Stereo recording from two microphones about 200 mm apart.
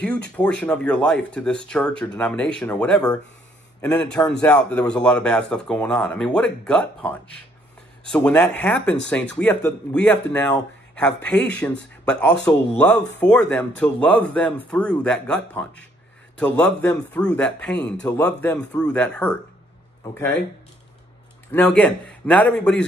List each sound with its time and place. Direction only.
0.4 s speech: 5° left (ahead or behind)
11.2 s speech: 5° left (ahead or behind)
21.5 s speech: 5° left (ahead or behind)